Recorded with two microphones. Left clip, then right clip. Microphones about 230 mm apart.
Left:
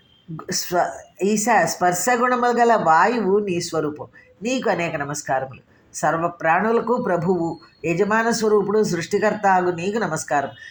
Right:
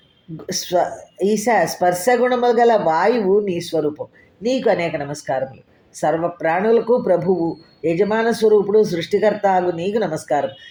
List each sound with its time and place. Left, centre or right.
0.4 s speech: centre
7.8 s speech: centre